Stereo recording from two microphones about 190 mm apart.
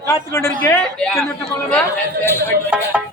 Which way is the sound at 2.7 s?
5° right (ahead or behind).